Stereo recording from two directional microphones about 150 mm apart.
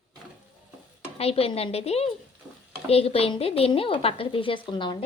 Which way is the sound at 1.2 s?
40° left (ahead or behind).